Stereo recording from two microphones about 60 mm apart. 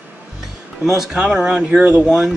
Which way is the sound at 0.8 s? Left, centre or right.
Centre.